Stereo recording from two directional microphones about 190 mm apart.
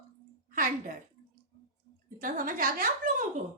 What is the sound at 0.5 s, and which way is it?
Speech, 45° right (ahead or behind).